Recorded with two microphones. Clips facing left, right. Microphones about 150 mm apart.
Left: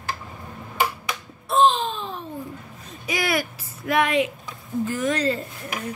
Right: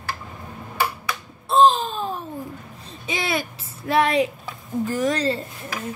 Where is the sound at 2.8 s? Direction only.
25° right (ahead or behind).